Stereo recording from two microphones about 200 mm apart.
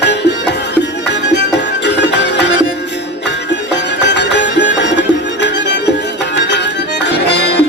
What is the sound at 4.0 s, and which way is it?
Music, 60° left (ahead or behind).